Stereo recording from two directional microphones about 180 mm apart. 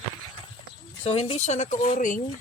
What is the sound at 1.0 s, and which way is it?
Speech, 35° left (ahead or behind).